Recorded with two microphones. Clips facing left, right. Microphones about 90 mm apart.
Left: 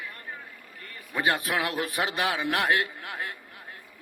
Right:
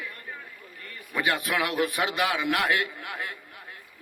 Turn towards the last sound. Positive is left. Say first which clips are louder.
# even
turn(degrees=35)  # may be behind; listen again after turning